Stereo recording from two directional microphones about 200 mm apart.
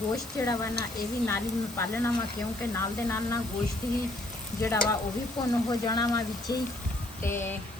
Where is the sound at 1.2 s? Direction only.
10° left (ahead or behind).